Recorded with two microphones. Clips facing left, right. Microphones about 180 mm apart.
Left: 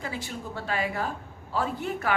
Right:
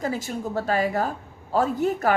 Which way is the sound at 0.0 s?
40° right (ahead or behind).